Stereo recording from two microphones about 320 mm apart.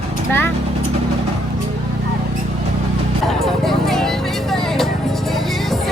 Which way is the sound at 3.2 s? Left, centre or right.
Centre.